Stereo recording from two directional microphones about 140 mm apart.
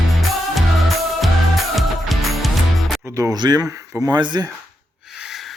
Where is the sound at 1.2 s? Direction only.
Centre (ahead or behind).